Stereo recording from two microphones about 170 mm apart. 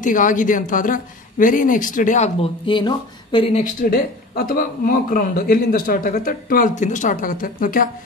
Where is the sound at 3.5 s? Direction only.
55° left (ahead or behind).